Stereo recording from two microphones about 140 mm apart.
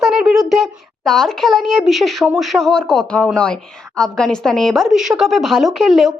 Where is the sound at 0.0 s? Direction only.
Centre (ahead or behind).